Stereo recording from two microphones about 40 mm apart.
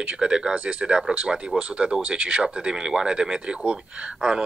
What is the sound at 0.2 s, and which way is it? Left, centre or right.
Speech, centre.